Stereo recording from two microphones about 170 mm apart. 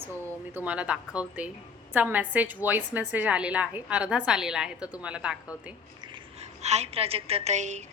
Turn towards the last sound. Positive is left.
turn(degrees=-45)  # may be behind; listen again after turning